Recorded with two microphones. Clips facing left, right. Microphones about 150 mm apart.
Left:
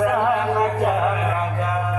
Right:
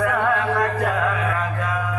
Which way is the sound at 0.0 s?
20° left (ahead or behind).